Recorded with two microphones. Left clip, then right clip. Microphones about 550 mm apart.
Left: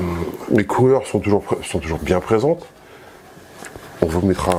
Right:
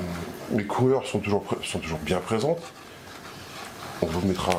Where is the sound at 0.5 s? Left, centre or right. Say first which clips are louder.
Left 8 dB; left.